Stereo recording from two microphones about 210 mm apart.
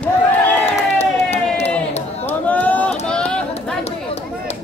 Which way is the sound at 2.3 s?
5° left (ahead or behind).